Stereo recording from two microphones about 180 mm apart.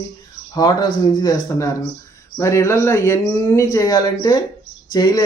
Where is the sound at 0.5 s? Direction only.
25° left (ahead or behind).